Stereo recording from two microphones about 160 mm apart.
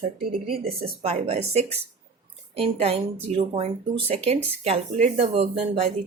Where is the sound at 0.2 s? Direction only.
70° right (ahead or behind).